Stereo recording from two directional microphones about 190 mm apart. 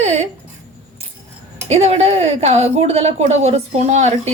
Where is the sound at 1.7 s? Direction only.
35° right (ahead or behind).